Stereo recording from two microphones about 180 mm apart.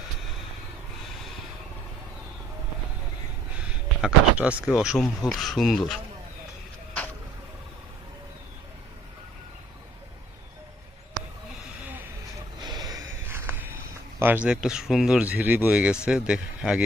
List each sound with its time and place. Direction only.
3.7 s speech: 5° right (ahead or behind)
12.6 s a sound: 20° right (ahead or behind)
14.2 s speech: 10° right (ahead or behind)